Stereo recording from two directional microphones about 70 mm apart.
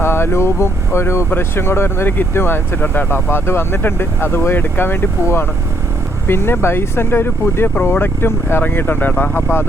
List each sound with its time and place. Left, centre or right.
0.0 s speech: left